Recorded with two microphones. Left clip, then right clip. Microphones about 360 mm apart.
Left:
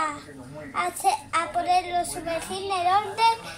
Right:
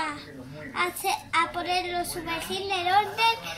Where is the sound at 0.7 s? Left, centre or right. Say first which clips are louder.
Left 3 dB; centre.